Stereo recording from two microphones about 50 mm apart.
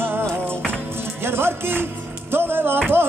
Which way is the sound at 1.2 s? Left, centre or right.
Right.